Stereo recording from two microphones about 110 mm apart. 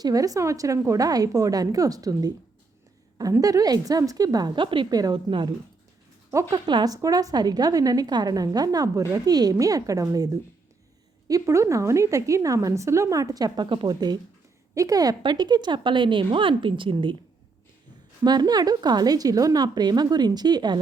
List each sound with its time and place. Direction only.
0.0 s a woman's voice: 30° right (ahead or behind)
3.4 s a woman's voice: 35° right (ahead or behind)
4.9 s a woman's voice: 35° right (ahead or behind)
6.5 s a woman's voice: 40° right (ahead or behind)
11.3 s a woman's voice: 30° right (ahead or behind); by 17.2 s 50° right (ahead or behind)
18.2 s a woman's voice: 40° right (ahead or behind)